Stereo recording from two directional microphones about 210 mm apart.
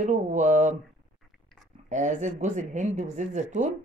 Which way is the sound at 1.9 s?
35° right (ahead or behind).